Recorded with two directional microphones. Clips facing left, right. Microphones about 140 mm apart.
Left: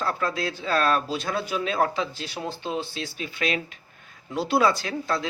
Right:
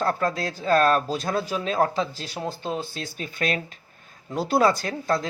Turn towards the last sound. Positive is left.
turn(degrees=-45)  # may be behind; listen again after turning